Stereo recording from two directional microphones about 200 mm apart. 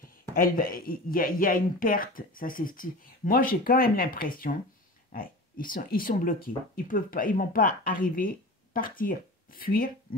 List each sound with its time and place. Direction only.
0.3 s speech: 45° left (ahead or behind)